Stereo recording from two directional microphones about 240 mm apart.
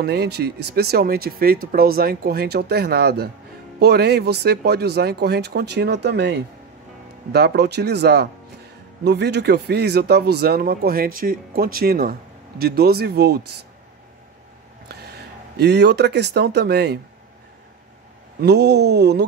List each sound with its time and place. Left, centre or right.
0.0 s speech: right
14.9 s speech: right
18.4 s speech: right